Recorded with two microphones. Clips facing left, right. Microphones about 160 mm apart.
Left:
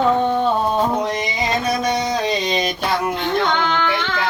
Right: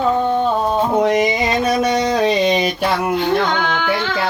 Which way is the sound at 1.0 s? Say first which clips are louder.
Right 8 dB; 60° right (ahead or behind).